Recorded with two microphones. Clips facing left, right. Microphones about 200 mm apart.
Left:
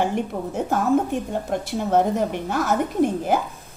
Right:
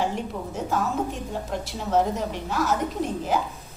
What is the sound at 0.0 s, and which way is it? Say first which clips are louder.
A woman's voice: left 4 dB; 55° left (ahead or behind).